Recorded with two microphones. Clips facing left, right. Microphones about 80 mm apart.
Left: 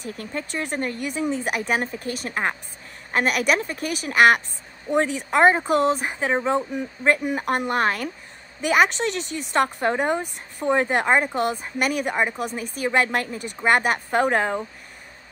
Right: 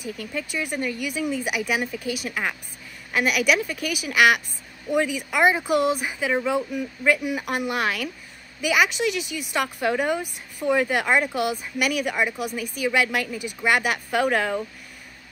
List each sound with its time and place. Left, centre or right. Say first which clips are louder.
0.0 s speech: even; left